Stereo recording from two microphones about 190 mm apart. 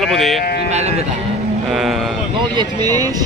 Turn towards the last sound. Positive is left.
turn(degrees=-20)  # may be behind; listen again after turning